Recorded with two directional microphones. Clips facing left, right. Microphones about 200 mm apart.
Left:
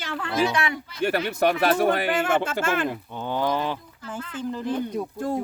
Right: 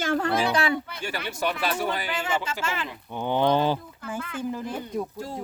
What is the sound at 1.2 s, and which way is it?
Speech, 55° left (ahead or behind).